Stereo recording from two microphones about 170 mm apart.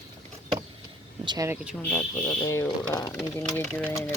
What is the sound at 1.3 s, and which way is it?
Speech, 20° right (ahead or behind).